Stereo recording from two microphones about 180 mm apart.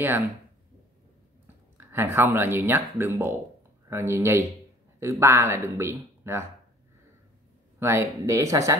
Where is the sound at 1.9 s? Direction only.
10° right (ahead or behind).